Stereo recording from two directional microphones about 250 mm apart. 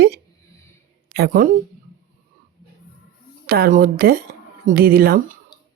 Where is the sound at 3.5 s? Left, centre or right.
Right.